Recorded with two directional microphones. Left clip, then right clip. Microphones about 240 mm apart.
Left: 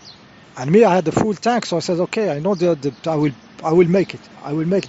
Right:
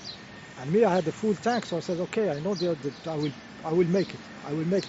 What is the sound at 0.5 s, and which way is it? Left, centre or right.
Speech, left.